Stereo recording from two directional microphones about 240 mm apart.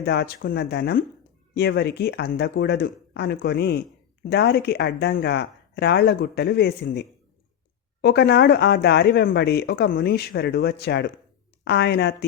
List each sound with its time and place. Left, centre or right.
0.0 s speech: left